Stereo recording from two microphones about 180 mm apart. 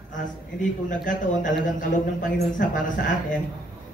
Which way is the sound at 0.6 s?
45° left (ahead or behind).